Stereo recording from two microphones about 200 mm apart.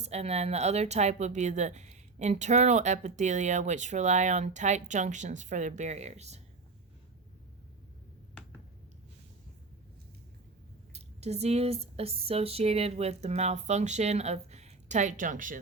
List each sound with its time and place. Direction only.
0.0 s speech: 35° right (ahead or behind)
10.9 s speech: 35° right (ahead or behind)